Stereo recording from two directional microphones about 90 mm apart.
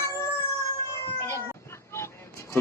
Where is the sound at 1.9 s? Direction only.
30° left (ahead or behind).